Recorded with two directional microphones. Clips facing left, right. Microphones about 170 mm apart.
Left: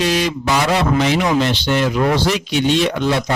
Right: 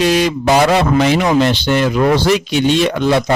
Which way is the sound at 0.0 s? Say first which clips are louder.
Right 5 dB; 55° right (ahead or behind).